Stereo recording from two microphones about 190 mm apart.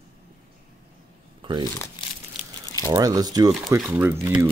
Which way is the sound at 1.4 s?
25° right (ahead or behind).